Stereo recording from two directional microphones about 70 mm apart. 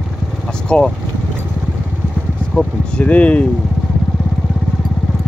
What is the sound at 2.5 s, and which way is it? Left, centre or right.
Speech, centre.